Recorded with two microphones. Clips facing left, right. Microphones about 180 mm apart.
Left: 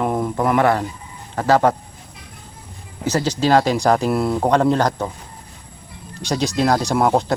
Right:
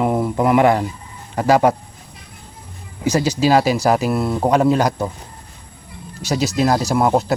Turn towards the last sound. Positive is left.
turn(degrees=-5)  # may be behind; listen again after turning